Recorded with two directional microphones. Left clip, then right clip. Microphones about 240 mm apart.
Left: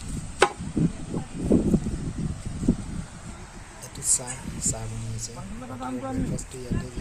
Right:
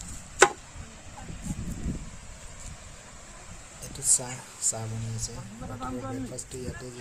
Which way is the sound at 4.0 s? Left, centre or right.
Centre.